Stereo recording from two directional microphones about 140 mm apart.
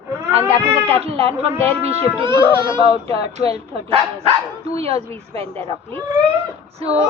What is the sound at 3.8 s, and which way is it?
Speech, 45° right (ahead or behind).